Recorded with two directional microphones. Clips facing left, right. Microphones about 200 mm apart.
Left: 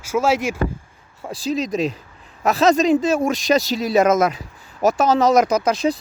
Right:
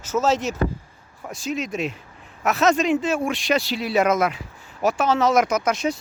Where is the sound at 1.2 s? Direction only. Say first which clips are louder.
Left 5 dB; 35° left (ahead or behind).